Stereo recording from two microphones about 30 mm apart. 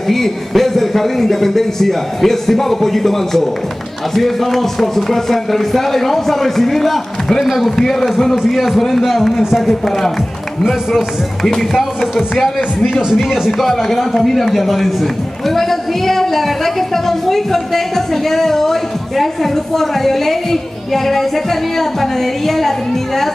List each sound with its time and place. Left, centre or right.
0.1 s a man's voice: centre
7.4 s a man's voice: centre
12.0 s speech: centre
13.5 s a man's voice: centre